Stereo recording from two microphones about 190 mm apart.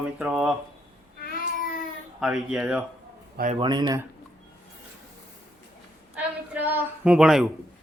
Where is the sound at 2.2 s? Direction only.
5° right (ahead or behind).